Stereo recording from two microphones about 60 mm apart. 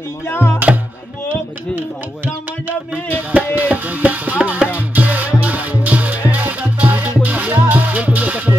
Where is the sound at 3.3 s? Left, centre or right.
Right.